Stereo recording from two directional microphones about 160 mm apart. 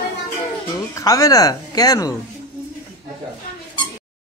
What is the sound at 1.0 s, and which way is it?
Speech, 20° left (ahead or behind).